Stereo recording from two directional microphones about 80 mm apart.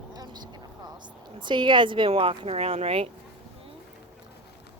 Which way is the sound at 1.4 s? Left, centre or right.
Right.